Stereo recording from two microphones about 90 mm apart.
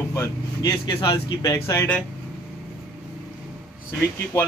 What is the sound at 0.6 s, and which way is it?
Speech, 45° left (ahead or behind).